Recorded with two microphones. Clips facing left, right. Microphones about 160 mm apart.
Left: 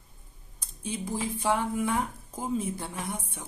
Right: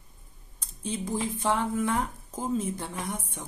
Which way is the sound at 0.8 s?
10° left (ahead or behind).